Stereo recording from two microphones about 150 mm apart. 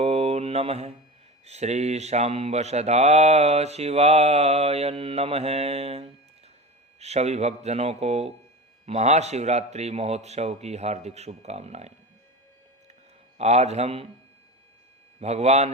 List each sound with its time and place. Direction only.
0.0 s mantra: 45° right (ahead or behind)
13.4 s mantra: 45° right (ahead or behind)
15.2 s mantra: 45° right (ahead or behind)